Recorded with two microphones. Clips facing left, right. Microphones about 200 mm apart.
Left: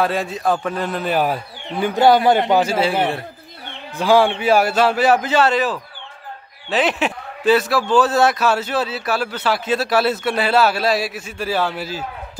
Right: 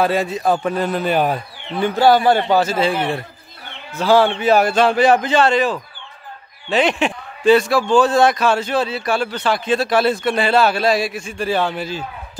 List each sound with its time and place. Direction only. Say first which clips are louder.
0.0 s a man's voice: right 2 dB; centre (ahead or behind)
2.0 s a man's voice: even; 20° left (ahead or behind)